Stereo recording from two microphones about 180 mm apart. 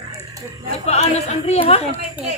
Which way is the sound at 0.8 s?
35° left (ahead or behind).